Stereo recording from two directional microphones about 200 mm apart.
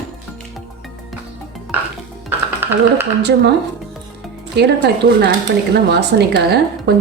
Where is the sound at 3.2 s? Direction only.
55° right (ahead or behind).